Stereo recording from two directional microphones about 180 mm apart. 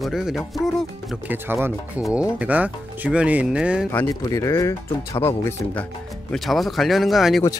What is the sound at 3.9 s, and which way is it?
Speech, 15° left (ahead or behind).